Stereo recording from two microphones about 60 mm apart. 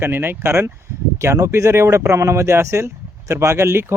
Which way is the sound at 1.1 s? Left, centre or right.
Right.